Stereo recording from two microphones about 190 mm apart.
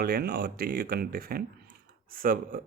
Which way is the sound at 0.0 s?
55° right (ahead or behind).